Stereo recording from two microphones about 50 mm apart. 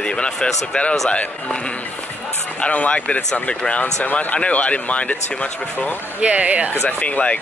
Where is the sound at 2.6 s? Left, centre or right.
Left.